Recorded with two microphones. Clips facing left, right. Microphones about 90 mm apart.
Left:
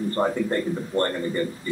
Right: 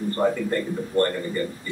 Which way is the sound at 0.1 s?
25° left (ahead or behind).